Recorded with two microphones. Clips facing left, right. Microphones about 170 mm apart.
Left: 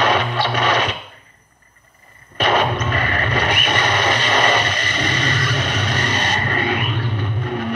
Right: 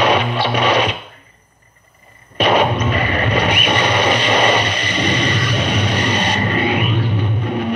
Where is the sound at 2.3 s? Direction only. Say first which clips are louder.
Right 3 dB; 10° right (ahead or behind).